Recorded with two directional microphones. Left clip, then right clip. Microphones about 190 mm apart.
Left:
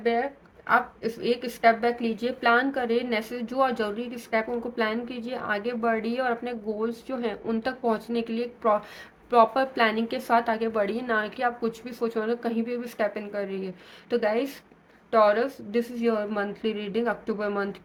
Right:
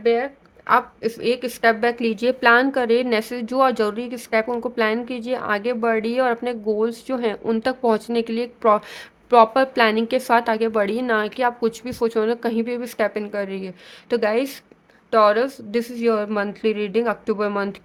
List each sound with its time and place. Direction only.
0.0 s a woman's voice: 55° right (ahead or behind)